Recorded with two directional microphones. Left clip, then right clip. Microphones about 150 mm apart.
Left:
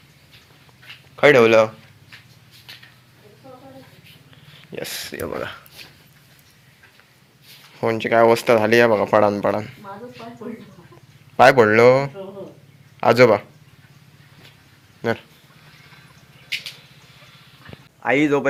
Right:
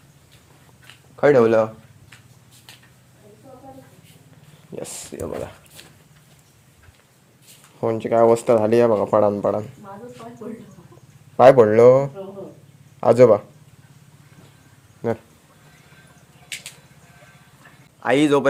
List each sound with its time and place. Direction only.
1.2 s speech: 5° right (ahead or behind)
4.7 s speech: 10° right (ahead or behind)
5.2 s speech: centre (ahead or behind)
7.8 s speech: 10° right (ahead or behind)
11.3 s speech: 10° right (ahead or behind)
18.0 s speech: 20° right (ahead or behind)